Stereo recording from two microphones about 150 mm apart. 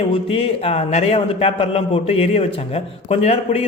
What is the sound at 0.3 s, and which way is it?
A man's voice, 40° left (ahead or behind).